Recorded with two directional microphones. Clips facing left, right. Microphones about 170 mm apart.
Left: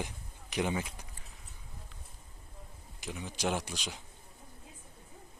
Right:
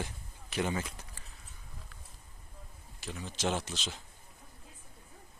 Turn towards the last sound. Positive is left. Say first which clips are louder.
# even
turn(degrees=15)  # may be behind; listen again after turning